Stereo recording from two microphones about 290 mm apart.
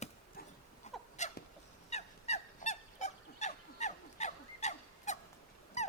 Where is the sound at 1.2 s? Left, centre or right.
Left.